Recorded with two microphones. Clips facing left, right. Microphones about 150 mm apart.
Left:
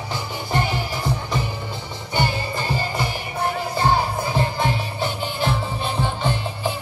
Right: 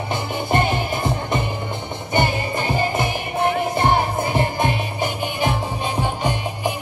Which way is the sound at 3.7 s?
20° right (ahead or behind).